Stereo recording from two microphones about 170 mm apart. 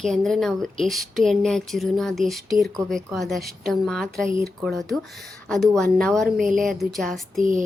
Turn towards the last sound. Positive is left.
turn(degrees=0)  # may be behind; listen again after turning